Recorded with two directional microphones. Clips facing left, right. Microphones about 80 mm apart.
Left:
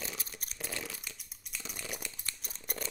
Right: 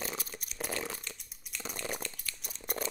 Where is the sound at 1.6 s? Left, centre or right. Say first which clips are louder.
Right 5 dB; right.